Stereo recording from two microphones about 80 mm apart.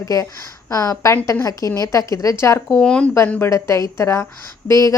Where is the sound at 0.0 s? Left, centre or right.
Left.